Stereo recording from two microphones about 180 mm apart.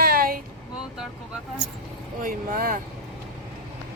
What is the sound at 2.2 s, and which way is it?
Speech, 50° right (ahead or behind).